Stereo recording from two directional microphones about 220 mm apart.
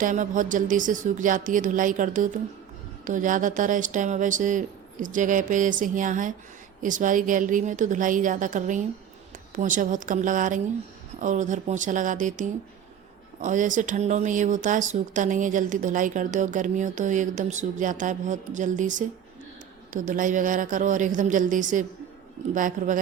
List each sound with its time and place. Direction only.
0.0 s speech: 35° right (ahead or behind)